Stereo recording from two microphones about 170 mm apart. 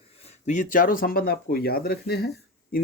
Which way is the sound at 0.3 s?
45° left (ahead or behind).